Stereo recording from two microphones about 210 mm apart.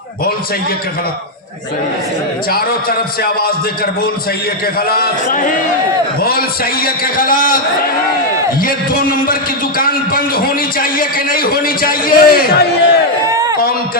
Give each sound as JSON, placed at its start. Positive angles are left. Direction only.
{"t": 2.5, "sound": "a man's voice", "side_deg": 45}
{"t": 4.9, "sound": "a man's voice", "side_deg": 40}
{"t": 6.8, "sound": "a man's voice", "side_deg": 45}
{"t": 8.6, "sound": "a man's voice", "side_deg": 40}
{"t": 13.3, "sound": "a sound", "side_deg": -15}